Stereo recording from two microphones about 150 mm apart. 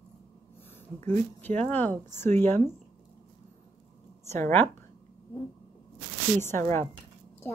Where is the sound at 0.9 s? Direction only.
15° left (ahead or behind).